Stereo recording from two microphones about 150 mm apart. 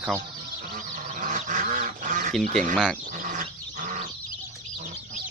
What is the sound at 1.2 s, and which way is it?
Duck, 60° right (ahead or behind).